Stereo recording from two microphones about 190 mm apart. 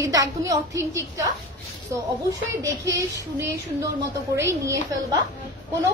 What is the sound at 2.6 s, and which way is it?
Speech, 15° right (ahead or behind).